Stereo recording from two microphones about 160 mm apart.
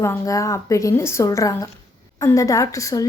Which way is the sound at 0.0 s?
20° left (ahead or behind).